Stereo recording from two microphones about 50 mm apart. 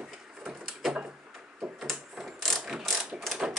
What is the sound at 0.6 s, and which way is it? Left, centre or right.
Door, centre.